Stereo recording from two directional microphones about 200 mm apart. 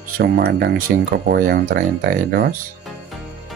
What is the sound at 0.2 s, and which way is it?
Speech, 50° right (ahead or behind).